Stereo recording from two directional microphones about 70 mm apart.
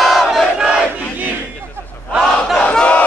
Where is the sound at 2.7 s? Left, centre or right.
Centre.